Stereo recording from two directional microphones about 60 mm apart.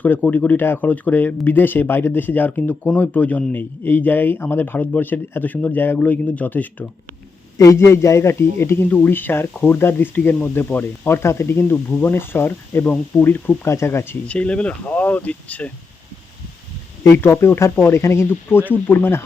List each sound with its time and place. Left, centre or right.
0.3 s speech: left
7.6 s speech: left
11.1 s speech: left
12.8 s speech: left
13.7 s speech: left
14.3 s speech: centre
17.2 s speech: left